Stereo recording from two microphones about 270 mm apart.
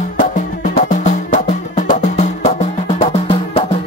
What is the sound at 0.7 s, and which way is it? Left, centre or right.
Music, left.